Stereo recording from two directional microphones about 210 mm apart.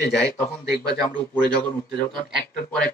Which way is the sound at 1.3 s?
5° left (ahead or behind).